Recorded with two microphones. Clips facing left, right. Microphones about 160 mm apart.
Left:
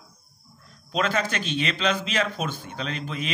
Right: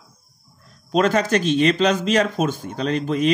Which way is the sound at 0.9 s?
45° right (ahead or behind).